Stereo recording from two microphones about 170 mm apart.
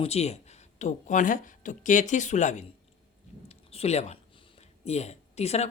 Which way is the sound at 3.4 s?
35° left (ahead or behind).